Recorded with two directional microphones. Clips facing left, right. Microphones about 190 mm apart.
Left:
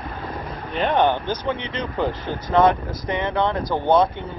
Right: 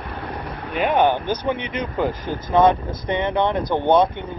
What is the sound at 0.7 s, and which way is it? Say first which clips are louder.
Speech: right 1 dB; 10° right (ahead or behind).